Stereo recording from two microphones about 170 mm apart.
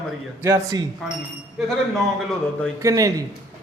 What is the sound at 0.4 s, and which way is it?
Speech, 20° right (ahead or behind).